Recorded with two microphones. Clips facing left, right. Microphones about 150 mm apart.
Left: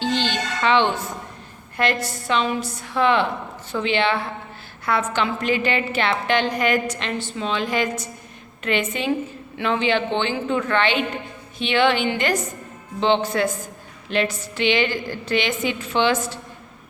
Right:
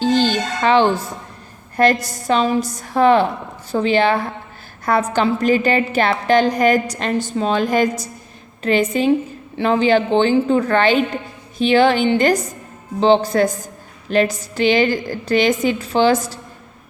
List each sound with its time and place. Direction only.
0.0 s music: 40° right (ahead or behind)
1.7 s a woman's voice: 40° right (ahead or behind)